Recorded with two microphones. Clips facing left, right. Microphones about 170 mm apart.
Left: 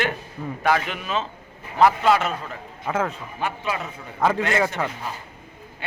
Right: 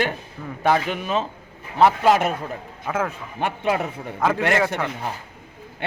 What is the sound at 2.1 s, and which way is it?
Speech, 45° right (ahead or behind).